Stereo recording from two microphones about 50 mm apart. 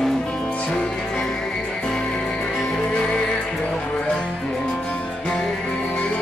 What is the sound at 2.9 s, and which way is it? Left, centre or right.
Music, centre.